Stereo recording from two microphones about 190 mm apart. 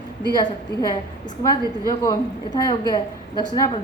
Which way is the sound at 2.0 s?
20° left (ahead or behind).